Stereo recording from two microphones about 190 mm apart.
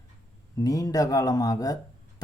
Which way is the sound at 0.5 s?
20° left (ahead or behind).